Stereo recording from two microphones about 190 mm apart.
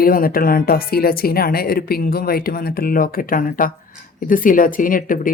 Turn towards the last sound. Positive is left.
turn(degrees=45)  # may be behind; listen again after turning